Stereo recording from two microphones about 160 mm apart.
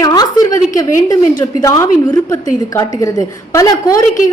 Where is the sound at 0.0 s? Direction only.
20° left (ahead or behind).